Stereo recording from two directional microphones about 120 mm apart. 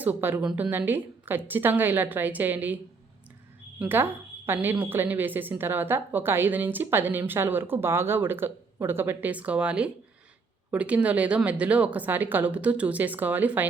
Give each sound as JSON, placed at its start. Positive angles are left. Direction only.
{"t": 0.0, "sound": "a woman's voice", "side_deg": -15}
{"t": 3.8, "sound": "a woman's voice", "side_deg": -15}